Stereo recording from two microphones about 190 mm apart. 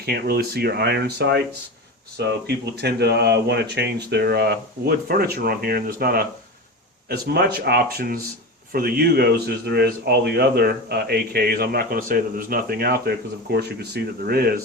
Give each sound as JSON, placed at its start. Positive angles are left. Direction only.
{"t": 0.0, "sound": "speech", "side_deg": -55}